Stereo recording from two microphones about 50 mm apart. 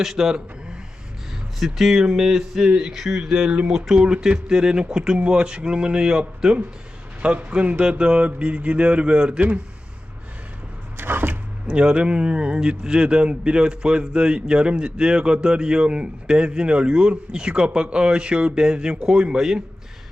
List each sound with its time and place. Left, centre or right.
0.0 s speech: centre
3.9 s speech: centre
7.2 s speech: right
10.9 s a sound: right
11.7 s speech: right